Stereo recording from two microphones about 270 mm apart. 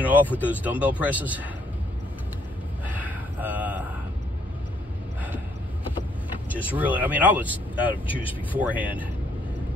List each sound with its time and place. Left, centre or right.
0.0 s speech: centre
3.0 s mantra: centre
6.5 s speech: centre
8.1 s speech: centre
8.5 s speech: centre